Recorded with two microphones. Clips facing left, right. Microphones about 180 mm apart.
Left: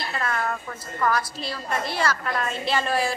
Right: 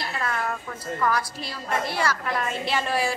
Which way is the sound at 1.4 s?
15° right (ahead or behind).